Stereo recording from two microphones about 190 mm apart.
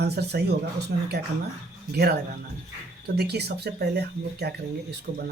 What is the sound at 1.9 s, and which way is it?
Speech, 55° right (ahead or behind).